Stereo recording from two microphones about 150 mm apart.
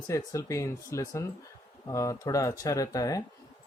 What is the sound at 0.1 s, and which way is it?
Speech, 20° left (ahead or behind).